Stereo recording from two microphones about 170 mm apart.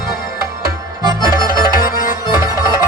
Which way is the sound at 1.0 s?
25° right (ahead or behind).